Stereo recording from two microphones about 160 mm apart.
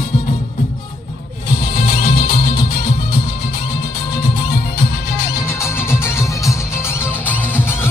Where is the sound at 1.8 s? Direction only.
80° left.